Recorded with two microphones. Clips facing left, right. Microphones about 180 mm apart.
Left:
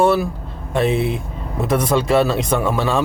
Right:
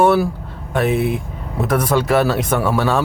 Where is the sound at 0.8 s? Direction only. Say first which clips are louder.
Even; 25° left (ahead or behind).